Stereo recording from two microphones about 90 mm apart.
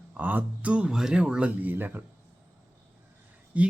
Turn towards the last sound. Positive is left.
turn(degrees=-15)  # may be behind; listen again after turning